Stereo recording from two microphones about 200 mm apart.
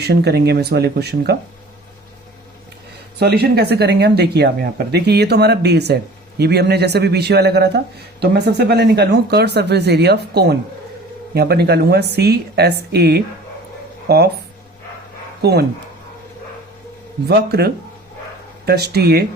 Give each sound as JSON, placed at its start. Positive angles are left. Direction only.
{"t": 0.0, "sound": "speech", "side_deg": -55}
{"t": 3.2, "sound": "a woman's voice", "side_deg": -55}
{"t": 15.4, "sound": "speech", "side_deg": -55}
{"t": 17.2, "sound": "a woman's voice", "side_deg": -55}